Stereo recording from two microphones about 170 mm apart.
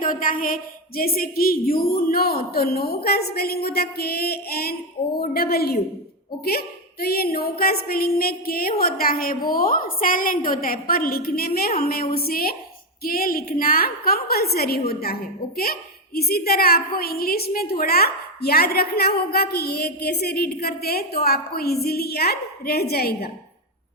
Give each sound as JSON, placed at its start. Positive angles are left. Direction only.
{"t": 0.0, "sound": "a woman's voice", "side_deg": 55}